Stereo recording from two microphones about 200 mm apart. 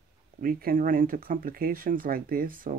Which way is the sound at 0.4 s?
45° right (ahead or behind).